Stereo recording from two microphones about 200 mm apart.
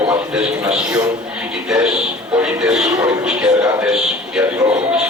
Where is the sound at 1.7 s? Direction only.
5° right (ahead or behind).